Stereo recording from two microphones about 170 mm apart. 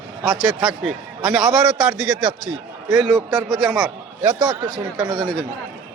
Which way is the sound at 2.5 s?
Centre (ahead or behind).